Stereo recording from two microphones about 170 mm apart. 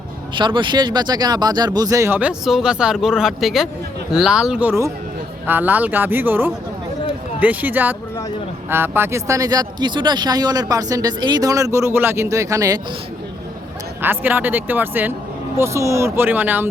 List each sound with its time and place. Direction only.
0.3 s speech: 30° right (ahead or behind)
14.0 s speech: 10° right (ahead or behind)